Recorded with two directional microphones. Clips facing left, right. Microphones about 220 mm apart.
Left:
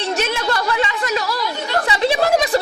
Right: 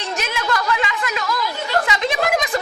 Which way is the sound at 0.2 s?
30° left (ahead or behind).